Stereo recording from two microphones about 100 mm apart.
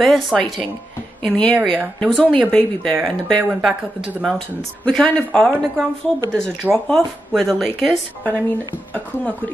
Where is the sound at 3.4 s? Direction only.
10° right (ahead or behind).